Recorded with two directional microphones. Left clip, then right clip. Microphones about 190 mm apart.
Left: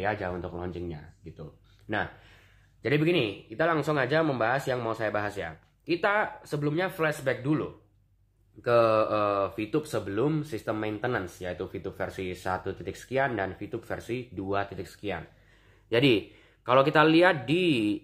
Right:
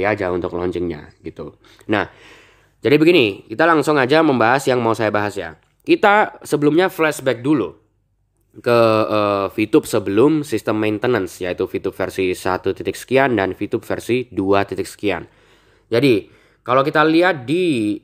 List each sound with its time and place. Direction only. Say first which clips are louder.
0.0 s speech: right 12 dB; 50° right (ahead or behind)
5.9 s speech: right 12 dB; 50° right (ahead or behind)
15.9 s speech: right 8 dB; 25° right (ahead or behind)